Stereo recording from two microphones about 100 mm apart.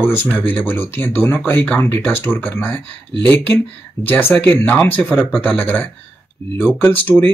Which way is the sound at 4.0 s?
20° left (ahead or behind).